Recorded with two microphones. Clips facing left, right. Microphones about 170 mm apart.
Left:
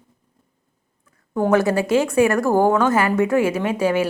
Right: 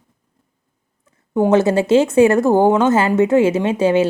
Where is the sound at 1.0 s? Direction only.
20° right (ahead or behind).